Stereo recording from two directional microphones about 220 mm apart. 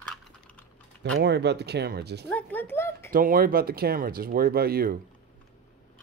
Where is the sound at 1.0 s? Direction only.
50° right (ahead or behind).